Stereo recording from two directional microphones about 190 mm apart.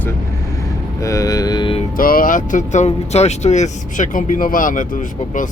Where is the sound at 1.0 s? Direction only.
15° left (ahead or behind).